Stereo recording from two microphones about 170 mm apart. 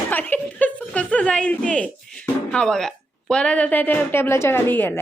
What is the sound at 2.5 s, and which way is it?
A woman's voice, 5° left (ahead or behind).